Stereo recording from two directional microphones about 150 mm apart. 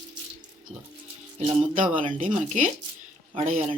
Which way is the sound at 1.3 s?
55° right (ahead or behind).